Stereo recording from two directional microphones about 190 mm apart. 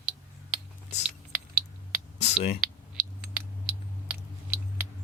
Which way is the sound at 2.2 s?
35° left (ahead or behind).